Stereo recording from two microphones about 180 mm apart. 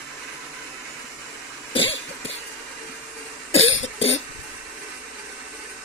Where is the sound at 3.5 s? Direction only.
35° left (ahead or behind).